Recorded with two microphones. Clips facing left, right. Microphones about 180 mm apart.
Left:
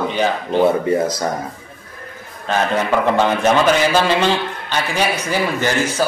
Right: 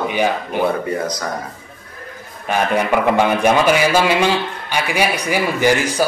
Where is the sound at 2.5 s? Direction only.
10° right (ahead or behind).